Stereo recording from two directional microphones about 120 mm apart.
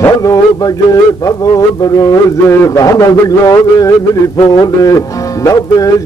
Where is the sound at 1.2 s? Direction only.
30° left (ahead or behind).